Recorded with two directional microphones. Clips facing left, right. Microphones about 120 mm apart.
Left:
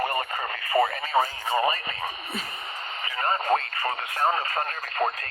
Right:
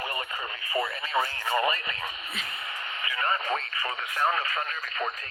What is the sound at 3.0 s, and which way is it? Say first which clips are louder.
Speech: left 2 dB; 35° left (ahead or behind).